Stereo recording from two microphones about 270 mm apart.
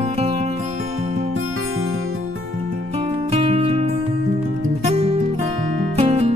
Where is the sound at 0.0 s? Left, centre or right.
Right.